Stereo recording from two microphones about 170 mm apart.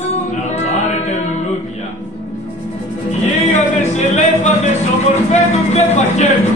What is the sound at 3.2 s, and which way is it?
Music, 45° left (ahead or behind).